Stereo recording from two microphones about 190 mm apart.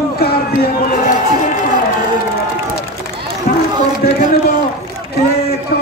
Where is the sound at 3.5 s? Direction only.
50° left (ahead or behind).